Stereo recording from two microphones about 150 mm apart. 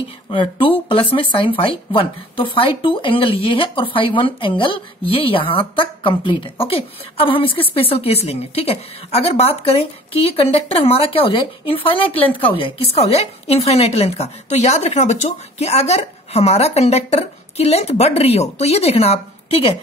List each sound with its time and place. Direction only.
0.3 s a woman's voice: 35° left (ahead or behind)